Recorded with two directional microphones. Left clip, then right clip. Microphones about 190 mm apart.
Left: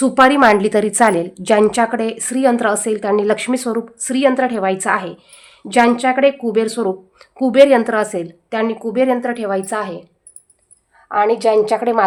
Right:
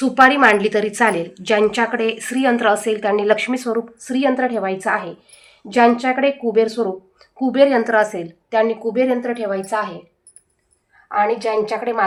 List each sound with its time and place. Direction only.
0.0 s a woman's voice: 85° left
11.1 s a woman's voice: 75° left (ahead or behind)